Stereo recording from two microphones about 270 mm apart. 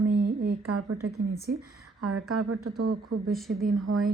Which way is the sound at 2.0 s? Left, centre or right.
Right.